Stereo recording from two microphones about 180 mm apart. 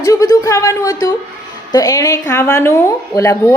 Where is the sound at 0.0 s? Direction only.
15° left (ahead or behind).